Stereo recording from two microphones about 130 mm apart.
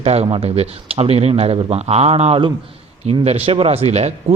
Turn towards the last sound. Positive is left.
turn(degrees=-55)  # may be behind; listen again after turning